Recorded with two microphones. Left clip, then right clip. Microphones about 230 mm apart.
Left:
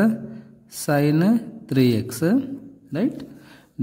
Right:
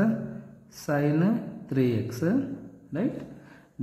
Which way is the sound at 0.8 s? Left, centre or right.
Left.